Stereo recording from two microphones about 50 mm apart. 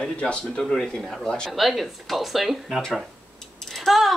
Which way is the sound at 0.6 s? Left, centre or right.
Centre.